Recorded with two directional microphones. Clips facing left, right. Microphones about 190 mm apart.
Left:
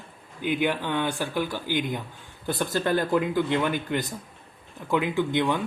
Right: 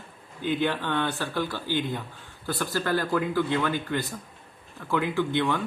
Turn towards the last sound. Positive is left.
turn(degrees=15)  # may be behind; listen again after turning